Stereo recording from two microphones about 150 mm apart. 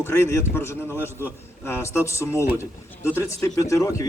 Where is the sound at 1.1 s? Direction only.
15° right (ahead or behind).